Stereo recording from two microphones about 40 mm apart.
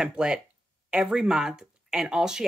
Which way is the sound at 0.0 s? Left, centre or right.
Centre.